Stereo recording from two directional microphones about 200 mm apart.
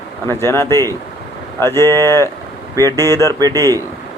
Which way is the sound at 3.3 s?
20° right (ahead or behind).